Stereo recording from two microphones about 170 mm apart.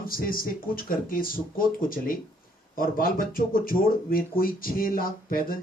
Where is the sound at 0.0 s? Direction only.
60° left (ahead or behind).